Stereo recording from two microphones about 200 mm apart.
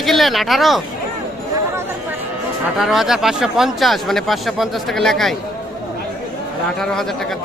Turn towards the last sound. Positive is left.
turn(degrees=0)  # may be behind; listen again after turning